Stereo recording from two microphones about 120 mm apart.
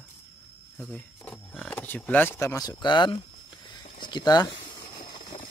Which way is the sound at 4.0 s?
35° left (ahead or behind).